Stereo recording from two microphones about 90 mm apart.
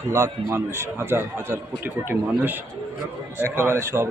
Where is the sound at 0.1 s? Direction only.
30° right (ahead or behind).